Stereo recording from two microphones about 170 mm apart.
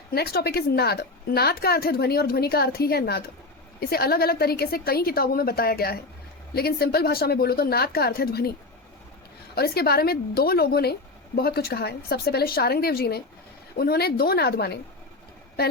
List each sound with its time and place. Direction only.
0.1 s a woman's voice: 65° left (ahead or behind)
9.6 s a woman's voice: 65° left (ahead or behind)